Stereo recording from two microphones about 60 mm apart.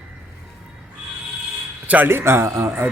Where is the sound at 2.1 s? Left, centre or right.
Right.